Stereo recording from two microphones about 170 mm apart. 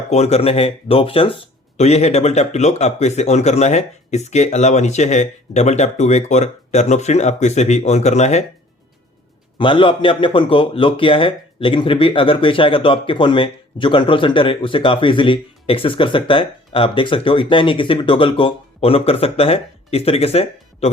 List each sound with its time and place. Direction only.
0.1 s a man's voice: 40° left (ahead or behind)
9.6 s a man's voice: 30° left (ahead or behind)